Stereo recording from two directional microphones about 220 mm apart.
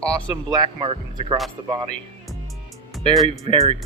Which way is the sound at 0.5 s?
20° right (ahead or behind).